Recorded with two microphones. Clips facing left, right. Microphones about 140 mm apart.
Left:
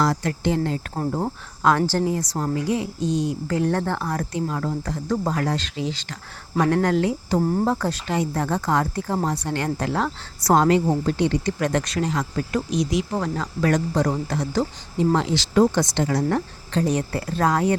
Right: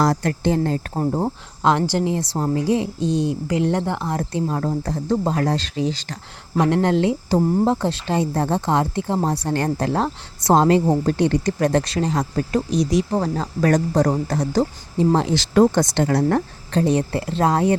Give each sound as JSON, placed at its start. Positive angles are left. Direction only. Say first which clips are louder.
{"t": 0.0, "sound": "speech", "louder": "right 3 dB", "side_deg": -45}
{"t": 0.9, "sound": "speech", "louder": "right 4 dB", "side_deg": -25}
{"t": 3.4, "sound": "speech", "louder": "right 2 dB", "side_deg": -20}
{"t": 6.6, "sound": "speech", "louder": "right 2 dB", "side_deg": -20}
{"t": 11.7, "sound": "speech", "louder": "right 3 dB", "side_deg": -30}
{"t": 15.4, "sound": "speech", "louder": "right 4 dB", "side_deg": -50}
{"t": 16.8, "sound": "speech", "louder": "right 4 dB", "side_deg": -30}